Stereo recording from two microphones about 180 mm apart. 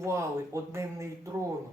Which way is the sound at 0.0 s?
15° right (ahead or behind).